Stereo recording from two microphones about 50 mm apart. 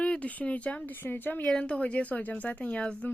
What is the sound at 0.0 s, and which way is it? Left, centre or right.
Speech, left.